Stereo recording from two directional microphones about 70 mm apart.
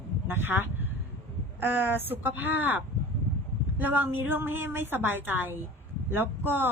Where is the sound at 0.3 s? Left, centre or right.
Right.